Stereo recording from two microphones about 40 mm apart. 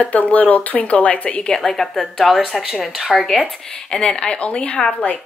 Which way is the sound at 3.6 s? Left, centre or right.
Left.